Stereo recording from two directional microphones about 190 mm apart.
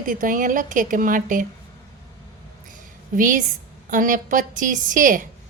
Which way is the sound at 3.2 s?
45° right (ahead or behind).